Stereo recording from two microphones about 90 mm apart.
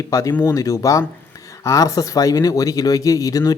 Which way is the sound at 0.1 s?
35° left (ahead or behind).